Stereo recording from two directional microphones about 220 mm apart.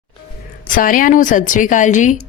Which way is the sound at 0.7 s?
40° left (ahead or behind).